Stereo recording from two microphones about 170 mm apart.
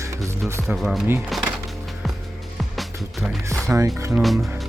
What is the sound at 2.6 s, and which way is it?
Music, centre (ahead or behind).